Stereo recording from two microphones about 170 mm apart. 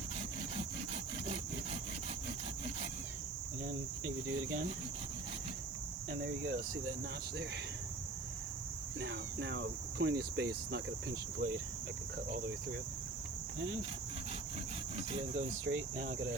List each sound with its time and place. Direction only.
6.1 s speech: 85° right
9.0 s speech: 90° right
14.9 s speech: 45° right (ahead or behind)
16.0 s cricket: 60° right (ahead or behind)